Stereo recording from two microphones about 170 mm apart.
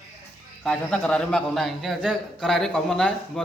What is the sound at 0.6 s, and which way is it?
A man's voice, 5° left (ahead or behind).